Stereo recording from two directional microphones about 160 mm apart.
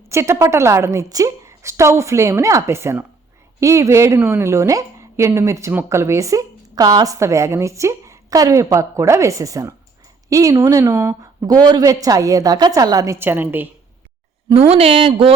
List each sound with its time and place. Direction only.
0.1 s a woman's voice: 15° right (ahead or behind)
14.7 s speech: 35° right (ahead or behind)